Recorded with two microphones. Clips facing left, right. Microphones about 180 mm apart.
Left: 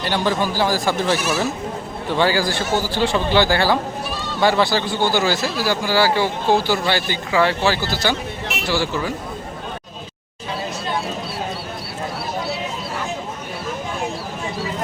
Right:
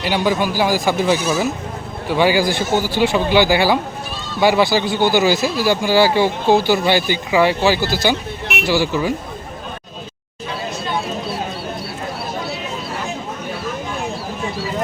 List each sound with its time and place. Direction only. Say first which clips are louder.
0.0 s speech: right 2 dB; 10° right (ahead or behind)